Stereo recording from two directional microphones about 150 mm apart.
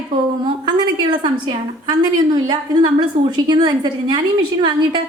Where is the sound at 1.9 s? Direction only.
30° right (ahead or behind).